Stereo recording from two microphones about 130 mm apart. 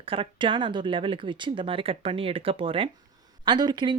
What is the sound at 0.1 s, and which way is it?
Speech, 40° right (ahead or behind).